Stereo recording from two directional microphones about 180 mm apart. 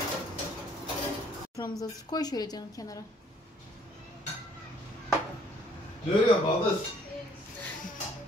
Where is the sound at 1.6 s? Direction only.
20° left (ahead or behind).